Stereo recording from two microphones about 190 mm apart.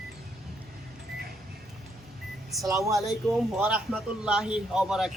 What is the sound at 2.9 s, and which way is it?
A man's voice, centre (ahead or behind).